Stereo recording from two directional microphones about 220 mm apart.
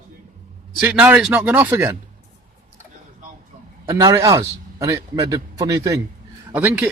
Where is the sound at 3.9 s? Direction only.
15° right (ahead or behind).